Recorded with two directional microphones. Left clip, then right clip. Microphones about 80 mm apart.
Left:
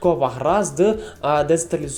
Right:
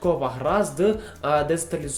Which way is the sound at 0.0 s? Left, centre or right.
Left.